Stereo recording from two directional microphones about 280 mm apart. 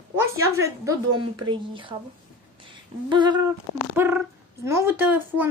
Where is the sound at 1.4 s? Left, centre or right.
Centre.